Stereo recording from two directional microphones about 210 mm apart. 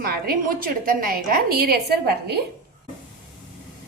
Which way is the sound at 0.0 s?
45° right (ahead or behind).